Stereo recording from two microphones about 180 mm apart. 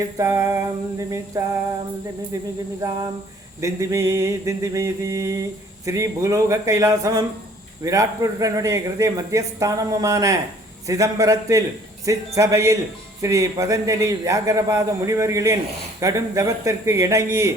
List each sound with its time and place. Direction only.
0.0 s mantra: 15° right (ahead or behind)
3.6 s mantra: 15° right (ahead or behind)
7.9 s a man's voice: 20° right (ahead or behind)
12.0 s mantra: 15° right (ahead or behind)